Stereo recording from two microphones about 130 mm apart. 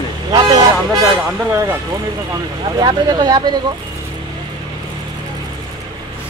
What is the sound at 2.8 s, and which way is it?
Speech, 35° right (ahead or behind).